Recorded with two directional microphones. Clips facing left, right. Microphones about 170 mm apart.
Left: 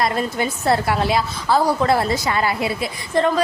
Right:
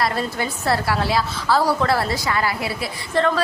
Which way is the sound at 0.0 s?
20° left (ahead or behind).